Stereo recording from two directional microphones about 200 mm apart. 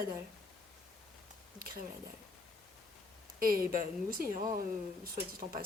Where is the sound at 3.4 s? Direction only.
45° right (ahead or behind).